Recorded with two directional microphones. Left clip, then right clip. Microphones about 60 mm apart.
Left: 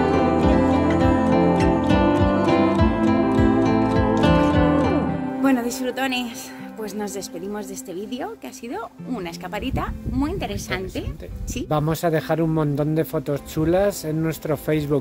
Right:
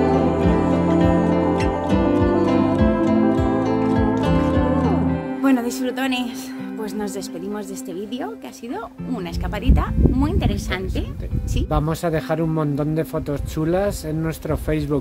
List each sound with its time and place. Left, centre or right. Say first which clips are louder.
0.0 s music: even; centre
5.4 s music: right 1 dB; right
9.5 s speech: right 2 dB; right
11.7 s a man's voice: left 1 dB; centre